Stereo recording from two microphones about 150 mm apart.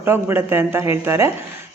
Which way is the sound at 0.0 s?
15° right (ahead or behind).